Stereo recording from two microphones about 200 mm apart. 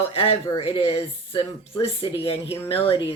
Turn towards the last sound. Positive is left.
turn(degrees=25)  # may be behind; listen again after turning